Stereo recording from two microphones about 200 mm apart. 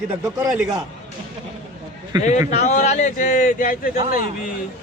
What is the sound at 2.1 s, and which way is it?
Speech, 20° right (ahead or behind).